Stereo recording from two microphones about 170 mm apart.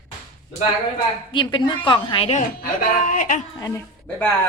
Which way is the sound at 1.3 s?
30° left (ahead or behind).